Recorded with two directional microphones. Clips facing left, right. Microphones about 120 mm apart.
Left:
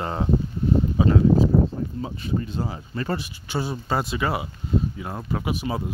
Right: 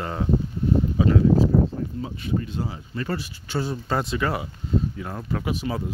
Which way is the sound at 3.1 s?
15° left (ahead or behind).